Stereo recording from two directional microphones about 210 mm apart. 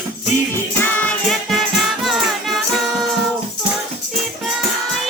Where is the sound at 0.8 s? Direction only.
5° left (ahead or behind).